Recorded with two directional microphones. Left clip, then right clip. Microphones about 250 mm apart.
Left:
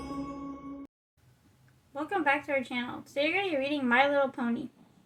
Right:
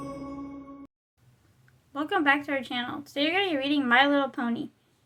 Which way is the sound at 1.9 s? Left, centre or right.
Right.